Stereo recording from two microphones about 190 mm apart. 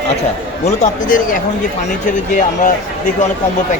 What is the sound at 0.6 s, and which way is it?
Speech, 40° left (ahead or behind).